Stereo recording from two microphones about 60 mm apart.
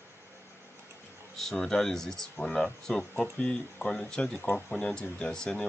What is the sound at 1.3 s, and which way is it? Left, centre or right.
Speech, centre.